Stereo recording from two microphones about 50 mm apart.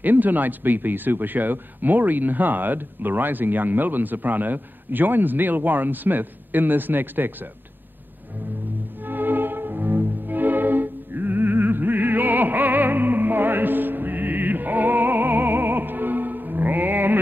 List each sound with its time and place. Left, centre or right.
0.0 s speech: right
9.0 s music: right